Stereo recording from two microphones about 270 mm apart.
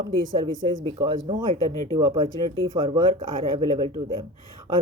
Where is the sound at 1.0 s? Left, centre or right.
Centre.